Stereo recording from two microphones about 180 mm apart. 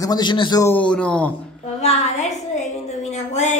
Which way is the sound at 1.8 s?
40° left (ahead or behind).